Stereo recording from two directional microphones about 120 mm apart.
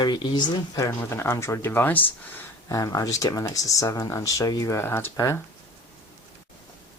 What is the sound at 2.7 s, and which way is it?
Speech, 30° left (ahead or behind).